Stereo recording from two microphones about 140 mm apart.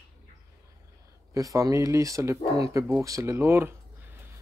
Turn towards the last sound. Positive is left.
turn(degrees=-15)  # may be behind; listen again after turning